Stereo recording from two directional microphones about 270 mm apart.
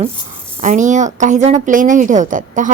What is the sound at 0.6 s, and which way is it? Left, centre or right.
A woman's voice, right.